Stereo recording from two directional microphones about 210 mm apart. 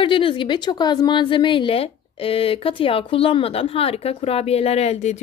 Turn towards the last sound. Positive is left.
turn(degrees=30)  # may be behind; listen again after turning